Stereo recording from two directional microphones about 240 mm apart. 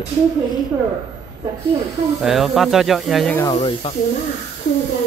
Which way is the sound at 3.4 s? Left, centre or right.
Left.